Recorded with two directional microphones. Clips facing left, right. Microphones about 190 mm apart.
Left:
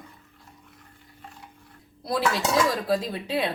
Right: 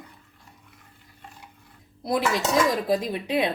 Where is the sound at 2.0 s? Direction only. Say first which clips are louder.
Right 1 dB; 20° right (ahead or behind).